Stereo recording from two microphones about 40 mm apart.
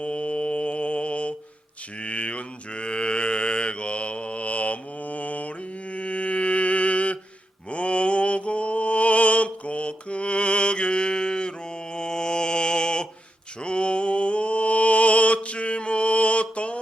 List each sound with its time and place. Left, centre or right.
0.0 s mantra: left